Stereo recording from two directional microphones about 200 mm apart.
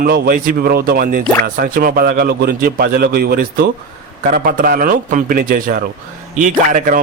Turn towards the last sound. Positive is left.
turn(degrees=-40)  # may be behind; listen again after turning